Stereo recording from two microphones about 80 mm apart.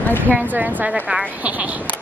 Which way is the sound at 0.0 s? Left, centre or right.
Left.